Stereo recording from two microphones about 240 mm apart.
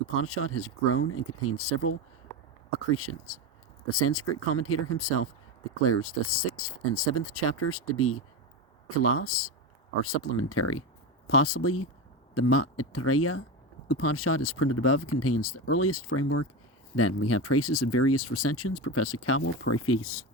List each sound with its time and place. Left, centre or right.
0.2 s speech: left